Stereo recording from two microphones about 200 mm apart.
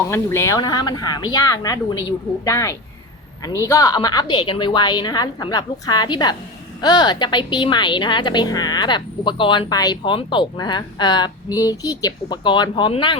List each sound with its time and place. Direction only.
0.1 s a woman's voice: 15° left (ahead or behind)